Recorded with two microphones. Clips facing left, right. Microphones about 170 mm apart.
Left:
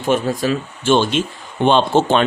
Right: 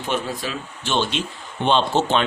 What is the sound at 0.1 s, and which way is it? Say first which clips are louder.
Speech: left 9 dB; 45° left (ahead or behind).